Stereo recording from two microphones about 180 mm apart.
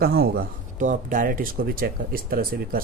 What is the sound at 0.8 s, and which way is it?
Speech, 45° right (ahead or behind).